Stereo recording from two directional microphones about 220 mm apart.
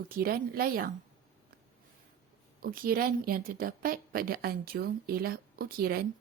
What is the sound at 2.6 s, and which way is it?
A woman's voice, 40° right (ahead or behind).